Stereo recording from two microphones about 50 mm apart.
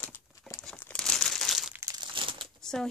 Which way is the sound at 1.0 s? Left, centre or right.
Centre.